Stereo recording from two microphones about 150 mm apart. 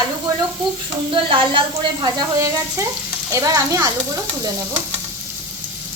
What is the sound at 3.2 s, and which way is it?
Frying, 20° right (ahead or behind).